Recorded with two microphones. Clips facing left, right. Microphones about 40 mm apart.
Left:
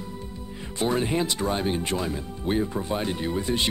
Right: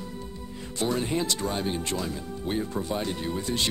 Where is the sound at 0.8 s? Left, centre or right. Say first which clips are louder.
Left 3 dB; left.